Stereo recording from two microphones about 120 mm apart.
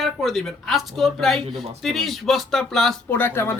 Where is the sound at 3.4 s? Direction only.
20° left (ahead or behind).